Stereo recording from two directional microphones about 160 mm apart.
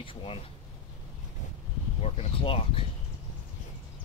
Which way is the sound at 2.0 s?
35° left (ahead or behind).